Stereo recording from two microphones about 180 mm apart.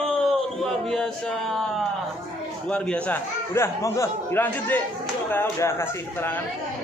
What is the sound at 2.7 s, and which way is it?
A man's voice, 10° left (ahead or behind).